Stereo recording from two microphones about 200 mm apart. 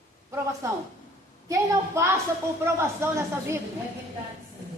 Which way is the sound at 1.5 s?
15° right (ahead or behind).